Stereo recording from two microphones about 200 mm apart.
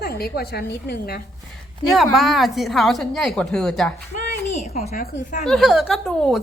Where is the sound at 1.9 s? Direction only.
Centre (ahead or behind).